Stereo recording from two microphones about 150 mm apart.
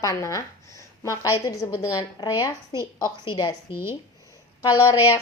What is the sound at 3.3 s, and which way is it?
Speech, 25° left (ahead or behind).